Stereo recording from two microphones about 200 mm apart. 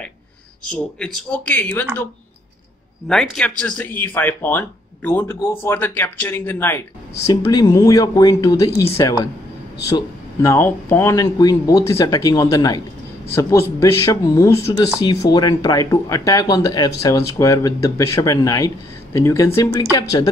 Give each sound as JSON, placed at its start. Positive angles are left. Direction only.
{"t": 0.7, "sound": "speech", "side_deg": 5}
{"t": 3.1, "sound": "speech", "side_deg": 5}